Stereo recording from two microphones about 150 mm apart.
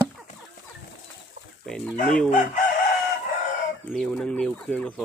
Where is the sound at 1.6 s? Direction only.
5° left (ahead or behind).